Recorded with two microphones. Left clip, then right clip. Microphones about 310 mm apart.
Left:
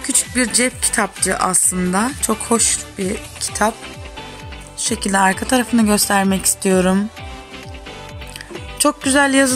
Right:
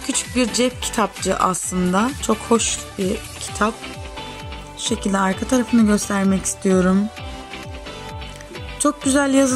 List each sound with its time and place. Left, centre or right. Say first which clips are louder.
0.0 s speech: left 2 dB; centre
4.8 s speech: left 5 dB; centre
8.8 s speech: left 3 dB; centre